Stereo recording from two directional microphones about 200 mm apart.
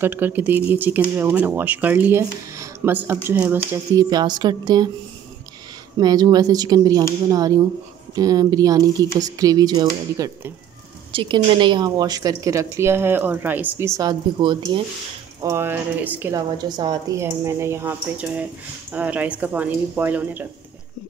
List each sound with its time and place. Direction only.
0.0 s speech: 10° right (ahead or behind)
5.9 s speech: 20° right (ahead or behind)
15.4 s speech: 10° right (ahead or behind)